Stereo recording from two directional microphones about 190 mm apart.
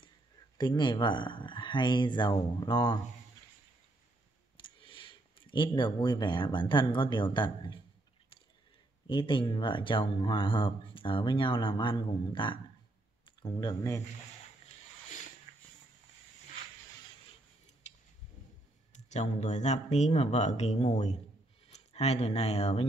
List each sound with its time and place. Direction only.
0.6 s speech: 25° left (ahead or behind)
4.6 s speech: 25° left (ahead or behind)
9.0 s speech: 25° left (ahead or behind)
18.9 s speech: 40° left (ahead or behind)